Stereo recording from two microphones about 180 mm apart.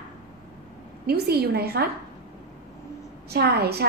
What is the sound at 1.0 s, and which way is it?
Speech, 60° right (ahead or behind).